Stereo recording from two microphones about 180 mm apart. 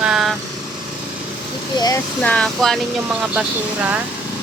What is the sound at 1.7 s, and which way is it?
Speech, 20° left (ahead or behind).